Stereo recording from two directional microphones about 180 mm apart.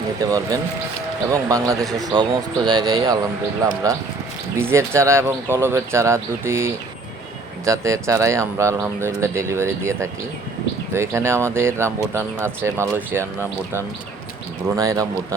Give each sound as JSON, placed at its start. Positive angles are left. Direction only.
{"t": 0.2, "sound": "speech", "side_deg": -20}
{"t": 14.8, "sound": "speech", "side_deg": -20}